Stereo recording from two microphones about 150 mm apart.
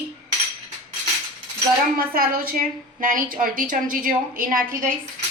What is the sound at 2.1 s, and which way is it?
A woman's voice, 80° right.